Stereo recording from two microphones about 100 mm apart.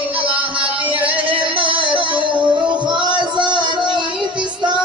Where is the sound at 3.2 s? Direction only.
50° right (ahead or behind).